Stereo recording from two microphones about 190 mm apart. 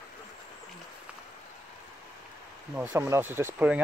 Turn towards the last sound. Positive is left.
turn(degrees=-10)  # may be behind; listen again after turning